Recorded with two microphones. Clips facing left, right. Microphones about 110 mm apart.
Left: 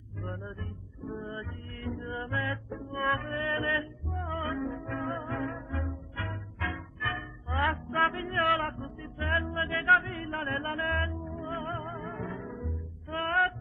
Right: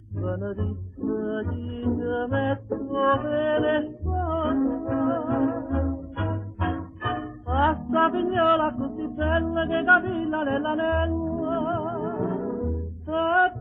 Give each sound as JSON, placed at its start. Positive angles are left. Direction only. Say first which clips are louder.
{"t": 0.2, "sound": "music", "louder": "right 11 dB", "side_deg": -30}